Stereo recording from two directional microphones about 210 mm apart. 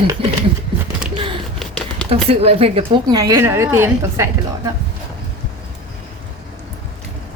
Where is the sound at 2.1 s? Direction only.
30° right (ahead or behind); by 4.2 s 10° right (ahead or behind).